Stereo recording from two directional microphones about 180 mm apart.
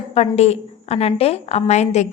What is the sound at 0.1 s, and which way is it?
A woman's voice, 35° left (ahead or behind).